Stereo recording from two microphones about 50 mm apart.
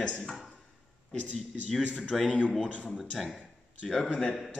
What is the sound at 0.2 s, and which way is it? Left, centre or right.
Speech, centre.